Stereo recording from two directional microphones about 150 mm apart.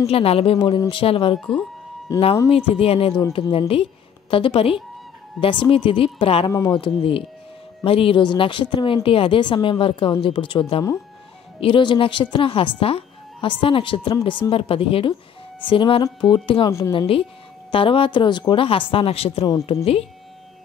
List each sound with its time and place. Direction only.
0.0 s speech: 40° left (ahead or behind)
1.4 s speech: 5° left (ahead or behind)
2.1 s speech: 20° left (ahead or behind)
2.5 s a woman's voice: 40° left (ahead or behind)